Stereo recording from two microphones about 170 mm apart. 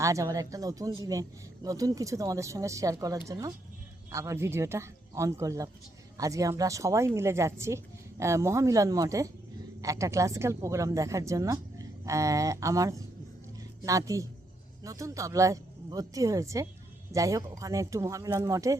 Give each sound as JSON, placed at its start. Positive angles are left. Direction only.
{"t": 0.0, "sound": "speech", "side_deg": -20}